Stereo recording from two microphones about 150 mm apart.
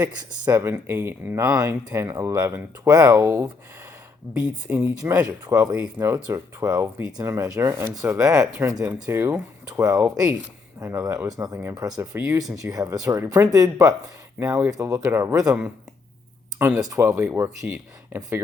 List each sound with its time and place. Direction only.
0.0 s speech: 10° right (ahead or behind)
16.6 s speech: 10° right (ahead or behind)